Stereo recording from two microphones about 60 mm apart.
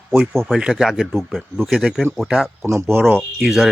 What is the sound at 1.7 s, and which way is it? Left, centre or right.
Speech, centre.